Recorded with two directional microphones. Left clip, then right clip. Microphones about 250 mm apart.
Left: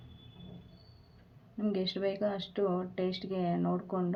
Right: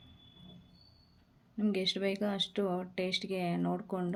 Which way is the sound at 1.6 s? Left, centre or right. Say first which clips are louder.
Right 1 dB; right.